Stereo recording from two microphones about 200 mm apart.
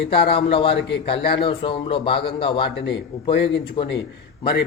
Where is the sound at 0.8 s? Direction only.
60° left (ahead or behind).